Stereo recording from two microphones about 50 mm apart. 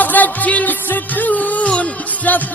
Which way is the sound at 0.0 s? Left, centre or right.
Left.